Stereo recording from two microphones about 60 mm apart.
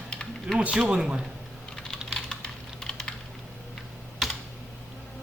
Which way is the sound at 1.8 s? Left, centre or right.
Centre.